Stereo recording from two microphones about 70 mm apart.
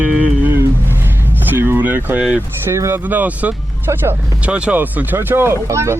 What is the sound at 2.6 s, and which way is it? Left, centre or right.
Speech, right.